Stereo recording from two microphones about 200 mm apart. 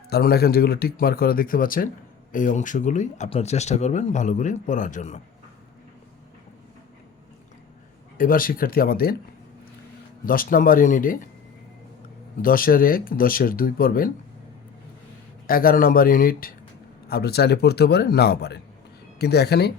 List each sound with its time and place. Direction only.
0.1 s speech: 50° left (ahead or behind)
8.2 s speech: 45° left (ahead or behind)
10.2 s speech: 45° left (ahead or behind)
12.4 s speech: 45° left (ahead or behind)
15.4 s speech: 45° left (ahead or behind)